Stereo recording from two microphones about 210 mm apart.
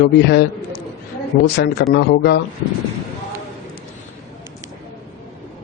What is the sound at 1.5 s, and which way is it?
Speech, 50° left (ahead or behind).